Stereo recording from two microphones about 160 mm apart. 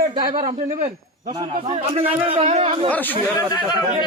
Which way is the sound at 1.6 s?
40° right (ahead or behind).